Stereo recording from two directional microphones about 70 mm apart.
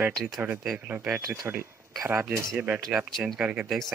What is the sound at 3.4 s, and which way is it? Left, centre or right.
Speech, centre.